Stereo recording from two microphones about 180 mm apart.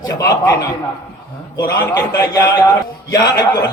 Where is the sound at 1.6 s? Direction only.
20° left (ahead or behind).